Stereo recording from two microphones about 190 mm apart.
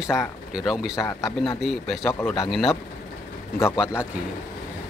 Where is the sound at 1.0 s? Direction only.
15° left (ahead or behind).